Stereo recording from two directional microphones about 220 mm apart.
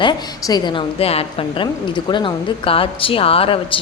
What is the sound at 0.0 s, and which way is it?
A woman's voice, 20° left (ahead or behind).